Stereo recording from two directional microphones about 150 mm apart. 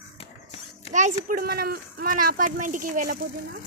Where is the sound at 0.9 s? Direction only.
60° right (ahead or behind).